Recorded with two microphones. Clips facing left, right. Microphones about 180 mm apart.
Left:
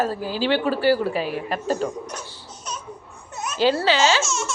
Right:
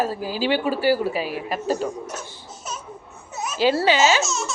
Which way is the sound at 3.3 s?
5° right (ahead or behind).